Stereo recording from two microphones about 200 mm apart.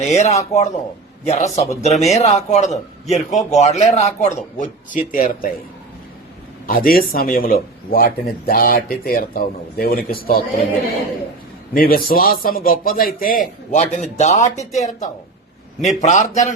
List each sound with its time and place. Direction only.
0.0 s a man's voice: 35° left (ahead or behind)
6.7 s a man's voice: 45° left (ahead or behind)